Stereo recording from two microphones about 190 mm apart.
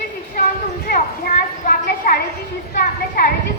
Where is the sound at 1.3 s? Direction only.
50° left (ahead or behind).